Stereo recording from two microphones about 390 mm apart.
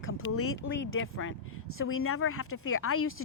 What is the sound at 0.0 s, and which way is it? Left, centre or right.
A woman's voice, left.